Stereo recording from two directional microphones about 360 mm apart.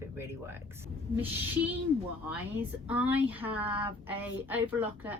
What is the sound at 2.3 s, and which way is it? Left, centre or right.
A woman's voice, centre.